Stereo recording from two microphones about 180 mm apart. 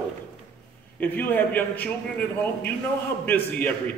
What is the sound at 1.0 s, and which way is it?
A man's voice, 10° left (ahead or behind).